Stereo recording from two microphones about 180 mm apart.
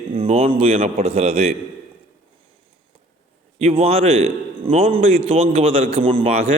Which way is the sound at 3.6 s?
35° right (ahead or behind).